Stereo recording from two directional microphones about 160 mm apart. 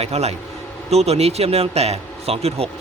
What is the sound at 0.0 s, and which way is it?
A man's voice, 40° right (ahead or behind).